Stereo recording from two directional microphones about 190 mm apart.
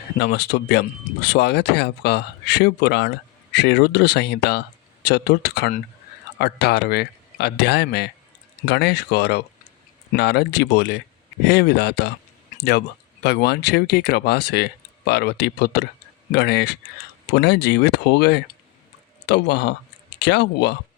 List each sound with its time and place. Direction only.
0.2 s speech: 60° left (ahead or behind)
13.2 s speech: 60° left (ahead or behind)